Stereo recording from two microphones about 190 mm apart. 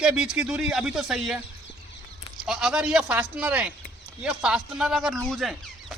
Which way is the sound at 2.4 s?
Centre (ahead or behind).